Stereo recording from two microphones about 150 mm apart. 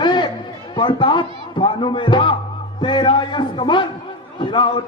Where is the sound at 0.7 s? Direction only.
30° left (ahead or behind).